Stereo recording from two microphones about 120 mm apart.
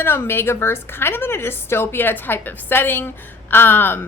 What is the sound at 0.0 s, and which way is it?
A woman's voice, 20° left (ahead or behind).